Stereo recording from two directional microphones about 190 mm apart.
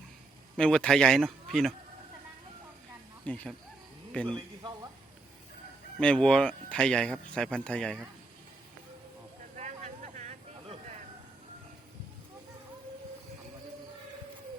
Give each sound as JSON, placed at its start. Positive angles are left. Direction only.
{"t": 0.5, "sound": "speech", "side_deg": 5}
{"t": 3.2, "sound": "speech", "side_deg": 5}
{"t": 6.0, "sound": "speech", "side_deg": 5}
{"t": 9.6, "sound": "a sound", "side_deg": -40}